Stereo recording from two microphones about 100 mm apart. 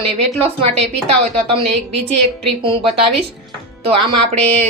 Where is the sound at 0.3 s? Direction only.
80° right.